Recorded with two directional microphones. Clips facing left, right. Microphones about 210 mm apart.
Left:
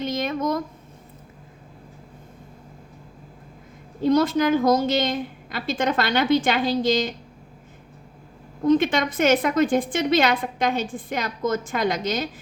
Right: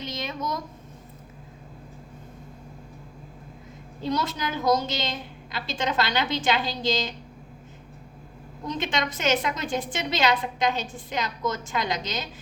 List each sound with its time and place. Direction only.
0.0 s speech: 55° left (ahead or behind)
4.0 s a woman's voice: 50° left (ahead or behind)
8.6 s a woman's voice: 55° left (ahead or behind)